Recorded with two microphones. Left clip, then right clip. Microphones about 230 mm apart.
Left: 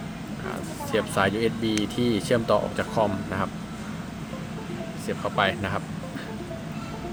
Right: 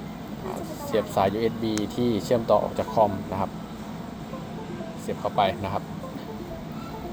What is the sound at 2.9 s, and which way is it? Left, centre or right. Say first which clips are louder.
Speech: right 3 dB; left.